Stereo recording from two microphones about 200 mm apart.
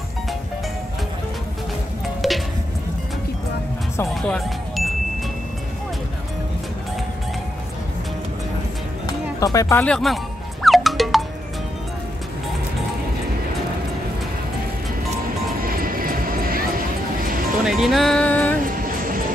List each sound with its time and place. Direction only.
2.2 s music: centre (ahead or behind)
4.1 s speech: centre (ahead or behind)
9.0 s music: 15° left (ahead or behind); by 11.2 s centre (ahead or behind)
15.6 s vehicle: 45° right (ahead or behind)
17.6 s music: centre (ahead or behind)
18.6 s music: 45° right (ahead or behind)